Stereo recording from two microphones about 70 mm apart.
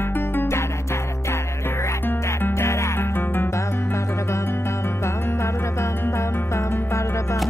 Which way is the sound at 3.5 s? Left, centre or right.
Left.